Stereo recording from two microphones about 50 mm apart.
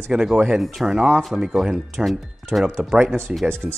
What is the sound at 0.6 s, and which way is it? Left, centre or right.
Speech, centre.